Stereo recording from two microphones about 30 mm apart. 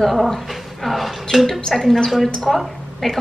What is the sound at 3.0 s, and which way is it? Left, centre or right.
Speech, centre.